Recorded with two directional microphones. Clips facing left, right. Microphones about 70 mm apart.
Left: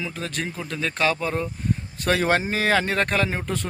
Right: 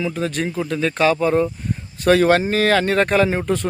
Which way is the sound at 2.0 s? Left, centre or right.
Centre.